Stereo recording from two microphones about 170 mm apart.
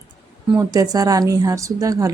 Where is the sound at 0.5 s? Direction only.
20° right (ahead or behind).